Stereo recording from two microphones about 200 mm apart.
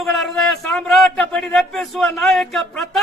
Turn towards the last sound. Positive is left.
turn(degrees=0)  # may be behind; listen again after turning